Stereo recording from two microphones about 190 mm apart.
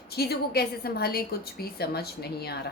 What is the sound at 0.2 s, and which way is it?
A woman's voice, 55° left (ahead or behind).